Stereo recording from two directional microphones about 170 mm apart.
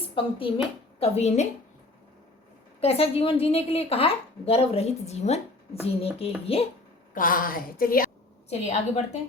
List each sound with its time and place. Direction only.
0.2 s a woman's voice: 30° left (ahead or behind)
2.8 s a woman's voice: 35° left (ahead or behind)
7.1 s a woman's voice: 55° left (ahead or behind)
8.4 s a woman's voice: 40° left (ahead or behind)